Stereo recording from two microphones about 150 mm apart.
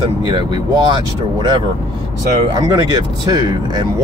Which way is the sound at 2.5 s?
30° right (ahead or behind).